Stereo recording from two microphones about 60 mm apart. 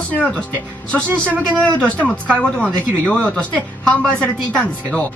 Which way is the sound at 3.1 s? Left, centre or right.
Left.